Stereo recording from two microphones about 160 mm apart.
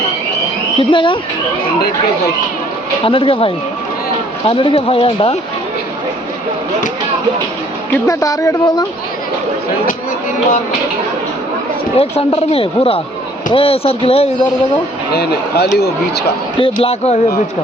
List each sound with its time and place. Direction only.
0.8 s speech: 30° left (ahead or behind)
3.0 s speech: 35° left (ahead or behind)
7.9 s speech: 20° left (ahead or behind)
11.9 s speech: 40° left (ahead or behind)
15.1 s speech: 90° left
16.6 s speech: 35° left (ahead or behind)